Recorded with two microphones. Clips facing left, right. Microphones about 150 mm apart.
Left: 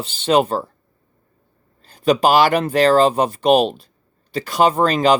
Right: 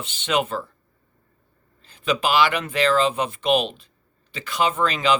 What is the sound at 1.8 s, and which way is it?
Speech, 40° left (ahead or behind).